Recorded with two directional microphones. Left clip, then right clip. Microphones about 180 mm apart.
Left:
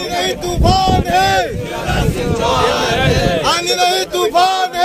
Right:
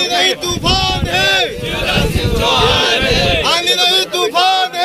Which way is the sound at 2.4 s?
65° left (ahead or behind).